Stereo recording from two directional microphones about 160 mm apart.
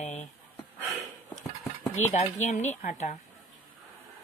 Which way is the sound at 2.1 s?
45° left (ahead or behind).